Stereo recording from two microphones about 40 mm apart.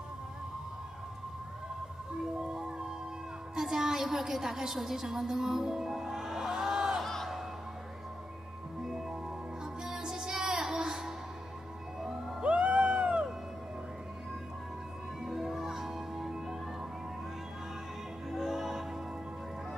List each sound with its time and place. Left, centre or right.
2.3 s music: right
3.5 s a sound: centre
7.0 s music: centre
9.8 s music: centre
12.4 s music: right
15.2 s music: centre
18.3 s music: centre